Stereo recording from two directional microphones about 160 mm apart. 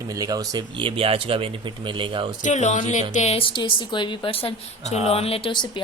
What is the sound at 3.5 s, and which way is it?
A woman's voice, 30° left (ahead or behind).